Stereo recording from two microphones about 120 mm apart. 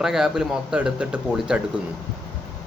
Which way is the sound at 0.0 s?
5° right (ahead or behind).